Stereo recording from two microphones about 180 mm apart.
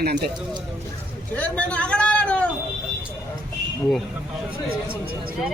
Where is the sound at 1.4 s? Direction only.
5° left (ahead or behind).